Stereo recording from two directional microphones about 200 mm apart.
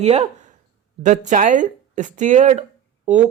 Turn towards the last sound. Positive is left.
turn(degrees=-35)  # may be behind; listen again after turning